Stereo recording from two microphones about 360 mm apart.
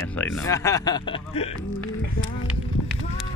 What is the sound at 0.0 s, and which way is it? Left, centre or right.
Speech, centre.